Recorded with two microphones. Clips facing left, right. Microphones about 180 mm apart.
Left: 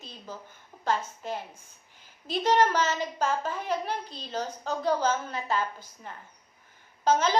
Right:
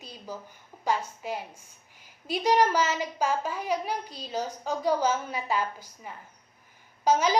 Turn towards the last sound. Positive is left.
turn(degrees=-10)  # may be behind; listen again after turning